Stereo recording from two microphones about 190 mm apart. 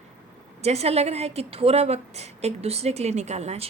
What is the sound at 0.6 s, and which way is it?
A woman's voice, 35° right (ahead or behind).